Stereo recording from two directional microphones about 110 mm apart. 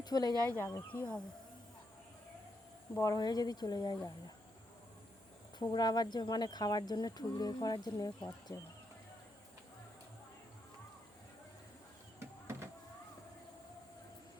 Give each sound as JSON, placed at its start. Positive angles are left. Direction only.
{"t": 0.0, "sound": "speech", "side_deg": 35}
{"t": 0.4, "sound": "speech", "side_deg": 20}
{"t": 3.0, "sound": "speech", "side_deg": 35}
{"t": 5.5, "sound": "speech", "side_deg": 40}
{"t": 12.2, "sound": "power windows", "side_deg": -25}